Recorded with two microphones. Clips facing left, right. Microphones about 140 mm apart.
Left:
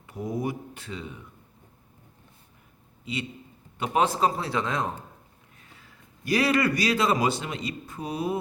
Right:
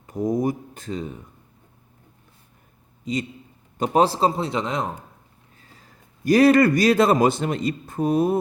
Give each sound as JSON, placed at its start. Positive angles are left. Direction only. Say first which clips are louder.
{"t": 0.1, "sound": "speech", "louder": "right 7 dB", "side_deg": -40}
{"t": 3.0, "sound": "a man's voice", "louder": "right 6 dB", "side_deg": -40}
{"t": 5.5, "sound": "a man's voice", "louder": "right 2 dB", "side_deg": -35}